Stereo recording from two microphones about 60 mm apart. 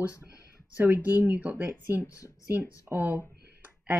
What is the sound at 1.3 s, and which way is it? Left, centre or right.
Speech, right.